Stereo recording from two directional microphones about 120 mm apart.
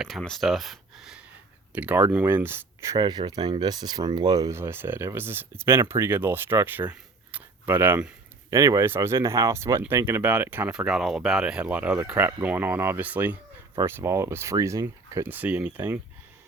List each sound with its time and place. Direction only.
0.0 s speech: centre (ahead or behind); by 3.0 s 25° right (ahead or behind)
3.0 s speech: 35° right (ahead or behind); by 8.1 s 15° right (ahead or behind)
8.4 s speech: 30° right (ahead or behind)
15.3 s speech: 15° right (ahead or behind)